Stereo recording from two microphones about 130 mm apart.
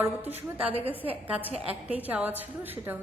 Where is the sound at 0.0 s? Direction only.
15° right (ahead or behind).